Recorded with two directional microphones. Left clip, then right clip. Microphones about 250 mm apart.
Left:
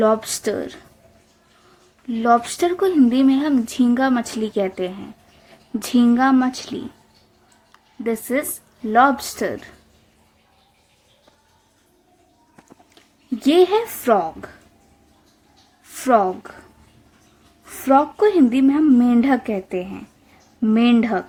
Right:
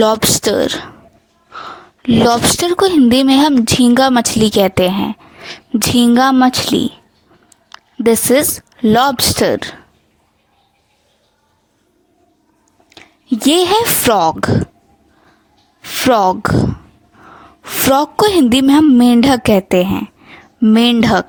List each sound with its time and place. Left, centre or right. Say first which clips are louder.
0.0 s a woman's voice: right 6 dB; right
2.0 s a woman's voice: right 6 dB; right
7.7 s a sound: right 12 dB; right
8.9 s a woman's voice: right 4 dB; right
12.9 s a woman's voice: right 10 dB; right
15.8 s a woman's voice: right 5 dB; right
17.6 s a woman's voice: right 4 dB; right